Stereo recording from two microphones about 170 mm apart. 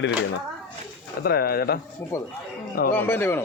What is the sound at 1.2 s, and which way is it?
Speech, 65° left (ahead or behind).